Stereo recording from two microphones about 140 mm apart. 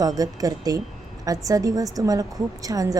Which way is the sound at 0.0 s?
25° right (ahead or behind).